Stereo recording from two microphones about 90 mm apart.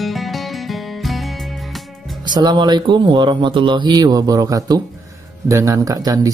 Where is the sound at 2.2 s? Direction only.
55° right (ahead or behind).